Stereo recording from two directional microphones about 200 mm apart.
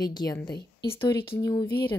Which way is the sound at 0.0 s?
20° left (ahead or behind).